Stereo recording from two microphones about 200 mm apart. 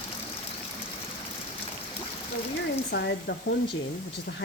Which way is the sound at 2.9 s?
55° left (ahead or behind).